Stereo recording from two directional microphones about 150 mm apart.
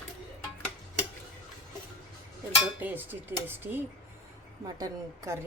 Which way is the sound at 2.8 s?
10° right (ahead or behind).